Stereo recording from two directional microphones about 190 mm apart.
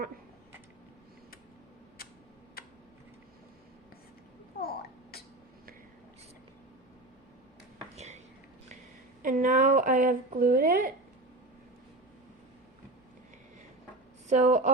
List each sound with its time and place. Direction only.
4.6 s babbling: 50° left (ahead or behind)
7.9 s a sound: 35° right (ahead or behind)
9.2 s a woman's voice: 45° right (ahead or behind)
14.3 s a woman's voice: 40° right (ahead or behind)